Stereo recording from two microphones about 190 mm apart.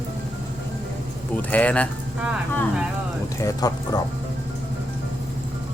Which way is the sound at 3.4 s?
20° left (ahead or behind).